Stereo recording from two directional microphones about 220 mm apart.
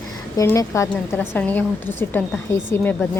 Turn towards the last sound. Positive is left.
turn(degrees=10)  # may be behind; listen again after turning